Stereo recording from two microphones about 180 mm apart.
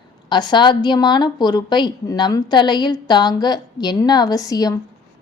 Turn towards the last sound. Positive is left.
turn(degrees=20)  # may be behind; listen again after turning